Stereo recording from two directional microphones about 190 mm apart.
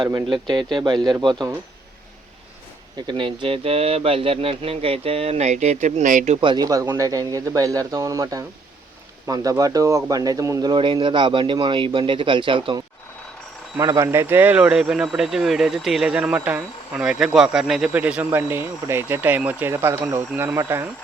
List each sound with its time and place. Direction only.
0.0 s speech: 20° right (ahead or behind)
3.1 s speech: 25° right (ahead or behind)